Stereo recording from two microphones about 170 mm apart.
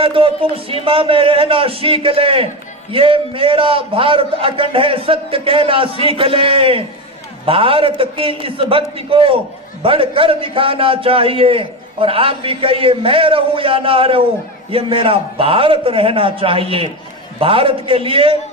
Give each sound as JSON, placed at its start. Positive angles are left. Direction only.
{"t": 0.0, "sound": "a man's voice", "side_deg": -30}